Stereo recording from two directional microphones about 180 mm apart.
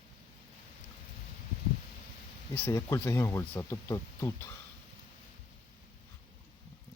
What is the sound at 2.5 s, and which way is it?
Speech, 15° left (ahead or behind).